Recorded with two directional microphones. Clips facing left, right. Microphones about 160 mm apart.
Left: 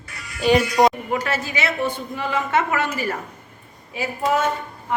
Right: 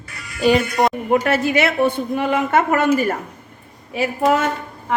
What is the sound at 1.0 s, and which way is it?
A woman's voice, 55° right (ahead or behind).